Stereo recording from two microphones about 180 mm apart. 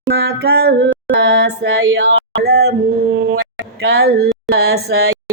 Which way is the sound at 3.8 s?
60° right (ahead or behind).